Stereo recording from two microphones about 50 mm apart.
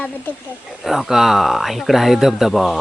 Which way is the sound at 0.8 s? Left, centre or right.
Centre.